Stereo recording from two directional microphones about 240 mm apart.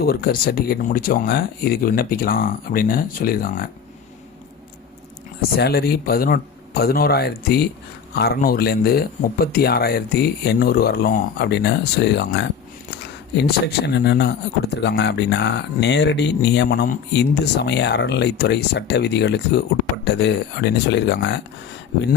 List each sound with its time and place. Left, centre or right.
0.0 s speech: left
5.4 s speech: left
13.8 s speech: left